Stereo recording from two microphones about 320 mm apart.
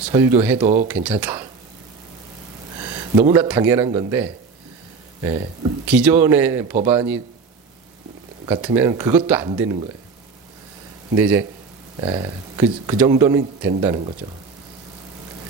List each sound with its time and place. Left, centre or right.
0.1 s speech: centre
3.3 s speech: centre
8.4 s speech: centre
11.2 s speech: centre